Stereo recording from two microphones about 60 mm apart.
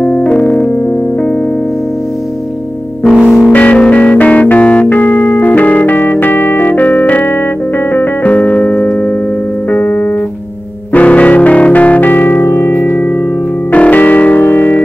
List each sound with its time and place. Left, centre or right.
0.0 s keyboard: left
3.3 s music: centre
3.5 s music: left
8.2 s keyboard: left
10.9 s music: left
13.7 s music: left